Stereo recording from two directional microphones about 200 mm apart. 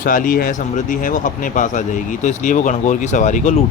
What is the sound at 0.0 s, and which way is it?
Speech, 40° left (ahead or behind).